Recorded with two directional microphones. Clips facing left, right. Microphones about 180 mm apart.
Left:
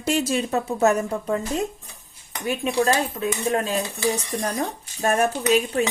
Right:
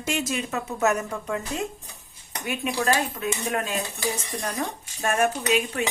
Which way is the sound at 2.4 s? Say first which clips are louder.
Left 4 dB; 30° left (ahead or behind).